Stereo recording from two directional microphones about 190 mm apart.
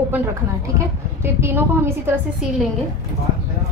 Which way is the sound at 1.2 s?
10° right (ahead or behind).